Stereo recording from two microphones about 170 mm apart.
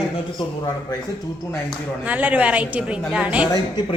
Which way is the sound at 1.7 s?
10° right (ahead or behind).